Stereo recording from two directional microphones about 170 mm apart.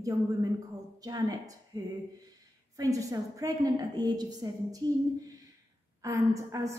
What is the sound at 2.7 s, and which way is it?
A woman's voice, 20° right (ahead or behind).